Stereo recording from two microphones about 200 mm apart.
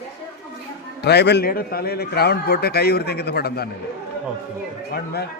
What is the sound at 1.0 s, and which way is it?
A man's voice, 55° left (ahead or behind).